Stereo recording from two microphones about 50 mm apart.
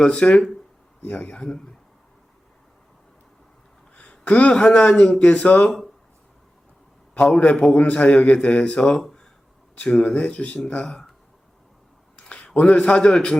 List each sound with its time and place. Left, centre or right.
0.0 s speech: centre
1.0 s a man's voice: left
3.9 s a sound: left
4.5 s a man's voice: centre
7.1 s a man's voice: left
10.8 s speech: centre
12.1 s a sound: left
12.5 s a man's voice: left